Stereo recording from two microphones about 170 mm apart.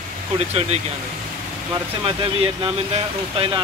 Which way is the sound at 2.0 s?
30° right (ahead or behind).